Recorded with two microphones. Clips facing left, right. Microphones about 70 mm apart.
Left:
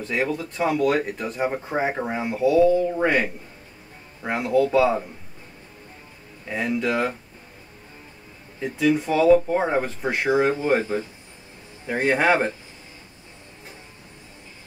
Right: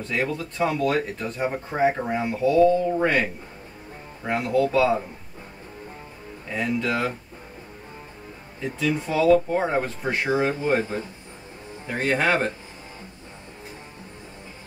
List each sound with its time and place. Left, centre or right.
0.1 s speech: centre
6.5 s speech: centre
8.5 s speech: centre
11.9 s speech: centre